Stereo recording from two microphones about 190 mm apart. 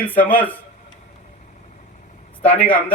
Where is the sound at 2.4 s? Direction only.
10° left (ahead or behind).